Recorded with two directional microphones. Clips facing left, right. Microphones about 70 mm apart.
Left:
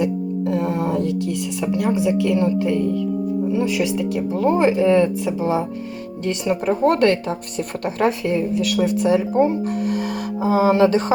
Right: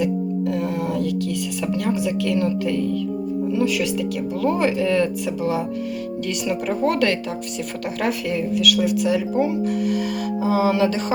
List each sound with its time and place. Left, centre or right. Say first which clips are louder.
0.5 s music: left 3 dB; left
1.6 s speech: left 4 dB; centre; by 11.0 s left